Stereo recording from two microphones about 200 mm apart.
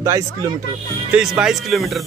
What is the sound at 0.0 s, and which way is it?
Speech, 15° right (ahead or behind).